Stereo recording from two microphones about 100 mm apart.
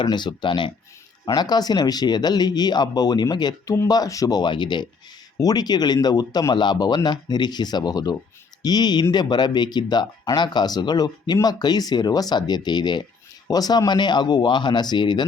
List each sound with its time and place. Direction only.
0.0 s speech: 50° left (ahead or behind)
1.2 s speech: 40° left (ahead or behind)